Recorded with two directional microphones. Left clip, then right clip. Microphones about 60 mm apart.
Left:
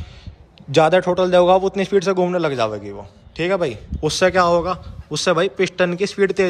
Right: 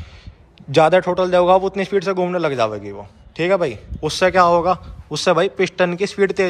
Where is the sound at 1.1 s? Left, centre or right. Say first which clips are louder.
Even; left.